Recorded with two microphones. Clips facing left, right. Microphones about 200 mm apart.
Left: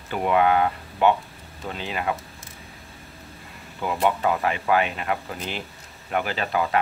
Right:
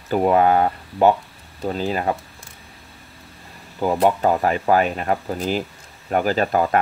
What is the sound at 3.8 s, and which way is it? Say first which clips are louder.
Speech: right 5 dB; 40° right (ahead or behind).